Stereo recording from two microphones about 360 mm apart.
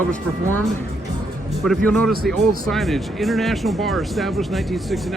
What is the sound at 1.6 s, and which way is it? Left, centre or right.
Speech, centre.